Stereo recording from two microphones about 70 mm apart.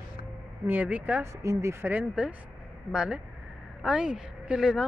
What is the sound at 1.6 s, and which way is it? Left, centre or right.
Speech, right.